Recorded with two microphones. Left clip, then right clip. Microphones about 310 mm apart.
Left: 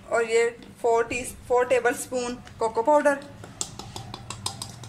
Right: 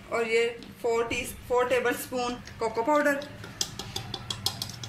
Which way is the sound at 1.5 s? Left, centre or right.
Left.